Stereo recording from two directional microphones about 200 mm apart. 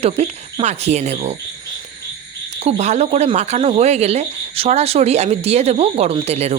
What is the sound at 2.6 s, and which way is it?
Speech, 30° right (ahead or behind).